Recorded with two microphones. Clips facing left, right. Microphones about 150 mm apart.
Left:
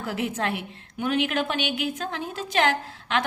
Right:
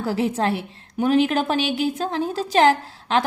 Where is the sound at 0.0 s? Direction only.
30° right (ahead or behind).